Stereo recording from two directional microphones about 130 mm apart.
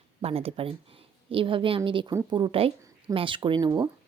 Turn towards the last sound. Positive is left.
turn(degrees=-35)  # may be behind; listen again after turning